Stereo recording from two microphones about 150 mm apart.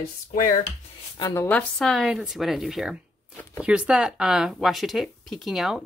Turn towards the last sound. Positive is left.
turn(degrees=0)  # may be behind; listen again after turning